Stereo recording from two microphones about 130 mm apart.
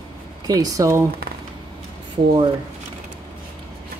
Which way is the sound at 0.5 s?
30° right (ahead or behind).